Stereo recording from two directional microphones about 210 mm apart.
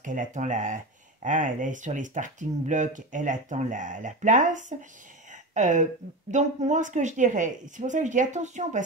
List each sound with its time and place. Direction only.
0.0 s speech: 35° right (ahead or behind)